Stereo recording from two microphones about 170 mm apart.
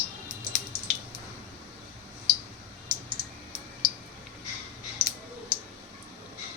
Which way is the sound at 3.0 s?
30° right (ahead or behind).